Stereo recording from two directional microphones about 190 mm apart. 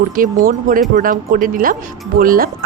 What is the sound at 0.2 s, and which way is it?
Speech, 45° right (ahead or behind).